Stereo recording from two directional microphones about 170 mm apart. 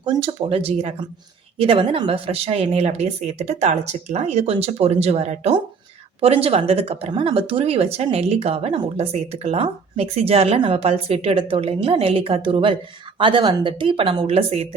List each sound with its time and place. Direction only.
0.0 s speech: 30° right (ahead or behind)